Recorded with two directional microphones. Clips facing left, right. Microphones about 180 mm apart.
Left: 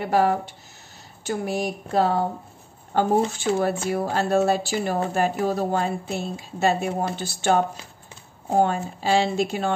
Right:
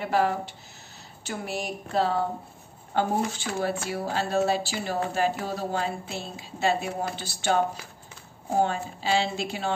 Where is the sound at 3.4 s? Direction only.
50° left (ahead or behind).